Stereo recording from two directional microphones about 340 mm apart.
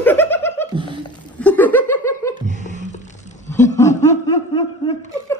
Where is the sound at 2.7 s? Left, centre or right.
Left.